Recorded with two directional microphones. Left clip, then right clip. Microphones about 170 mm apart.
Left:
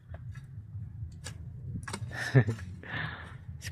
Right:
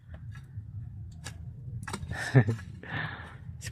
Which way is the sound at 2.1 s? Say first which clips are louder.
Right 1 dB; 10° right (ahead or behind).